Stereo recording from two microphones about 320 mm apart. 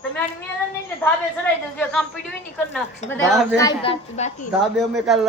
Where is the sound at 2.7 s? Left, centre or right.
Centre.